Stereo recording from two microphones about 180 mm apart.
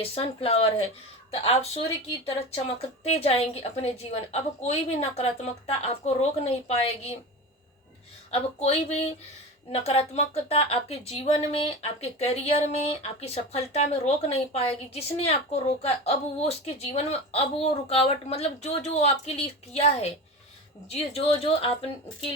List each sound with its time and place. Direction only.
0.0 s speech: 35° left (ahead or behind)
8.3 s speech: 35° left (ahead or behind)